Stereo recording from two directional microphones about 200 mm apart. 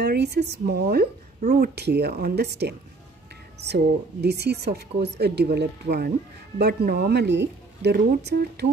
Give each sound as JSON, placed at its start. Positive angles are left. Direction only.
{"t": 0.0, "sound": "speech", "side_deg": -55}